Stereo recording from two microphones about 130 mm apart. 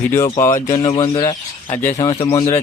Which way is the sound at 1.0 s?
45° left (ahead or behind).